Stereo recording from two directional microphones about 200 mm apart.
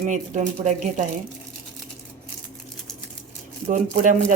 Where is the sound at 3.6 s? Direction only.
35° right (ahead or behind).